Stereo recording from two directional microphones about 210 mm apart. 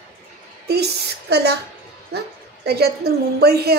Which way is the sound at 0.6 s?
50° right (ahead or behind).